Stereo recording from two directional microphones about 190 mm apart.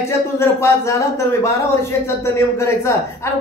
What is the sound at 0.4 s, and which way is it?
A man's voice, 15° left (ahead or behind).